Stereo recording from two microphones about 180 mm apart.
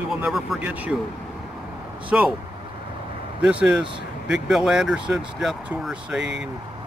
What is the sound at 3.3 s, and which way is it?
Speech, 5° right (ahead or behind).